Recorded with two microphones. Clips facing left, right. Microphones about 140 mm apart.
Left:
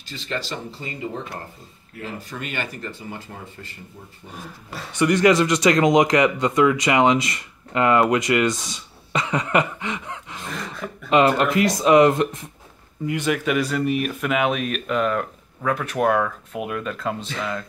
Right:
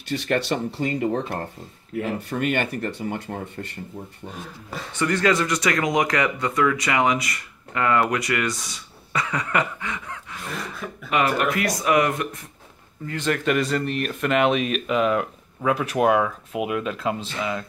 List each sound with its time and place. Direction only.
0.1 s speech: 65° right (ahead or behind)
4.9 s speech: 15° left (ahead or behind)
13.0 s speech: 10° left (ahead or behind)